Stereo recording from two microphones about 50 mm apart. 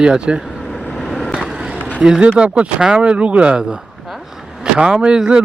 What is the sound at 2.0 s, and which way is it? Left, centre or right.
Speech, centre.